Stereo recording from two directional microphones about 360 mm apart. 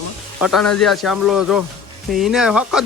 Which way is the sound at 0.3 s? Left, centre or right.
Centre.